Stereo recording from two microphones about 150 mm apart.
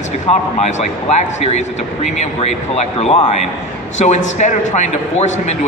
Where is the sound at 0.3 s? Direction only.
50° left (ahead or behind).